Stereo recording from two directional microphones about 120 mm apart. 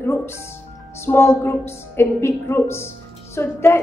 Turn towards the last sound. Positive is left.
turn(degrees=20)  # may be behind; listen again after turning